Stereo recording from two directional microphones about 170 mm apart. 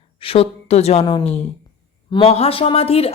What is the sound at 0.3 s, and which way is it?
A woman's voice, 35° left (ahead or behind).